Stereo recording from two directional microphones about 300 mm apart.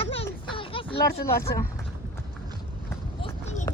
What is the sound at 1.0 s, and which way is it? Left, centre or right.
Speech, left.